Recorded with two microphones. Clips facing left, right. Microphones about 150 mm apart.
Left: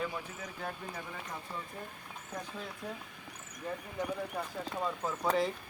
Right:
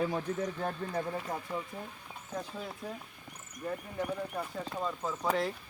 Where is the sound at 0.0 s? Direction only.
40° right (ahead or behind).